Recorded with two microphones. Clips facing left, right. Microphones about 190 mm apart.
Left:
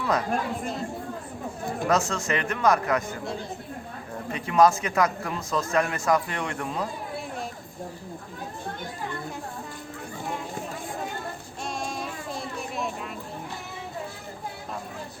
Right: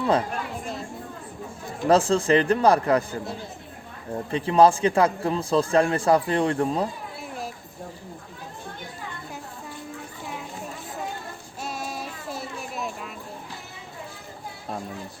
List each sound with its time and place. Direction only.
0.0 s speech: 30° right (ahead or behind)
1.9 s a man's voice: 30° right (ahead or behind)
4.3 s a man's voice: 30° right (ahead or behind)
11.6 s child singing: 5° right (ahead or behind)